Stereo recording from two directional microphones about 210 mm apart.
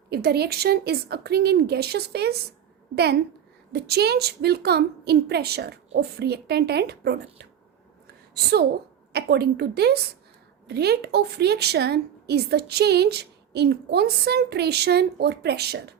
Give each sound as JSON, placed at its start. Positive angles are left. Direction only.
{"t": 0.1, "sound": "a woman's voice", "side_deg": -50}
{"t": 8.0, "sound": "a sound", "side_deg": -50}
{"t": 9.1, "sound": "a woman's voice", "side_deg": -50}